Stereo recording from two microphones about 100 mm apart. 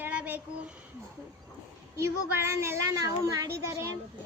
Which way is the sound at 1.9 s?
30° right (ahead or behind).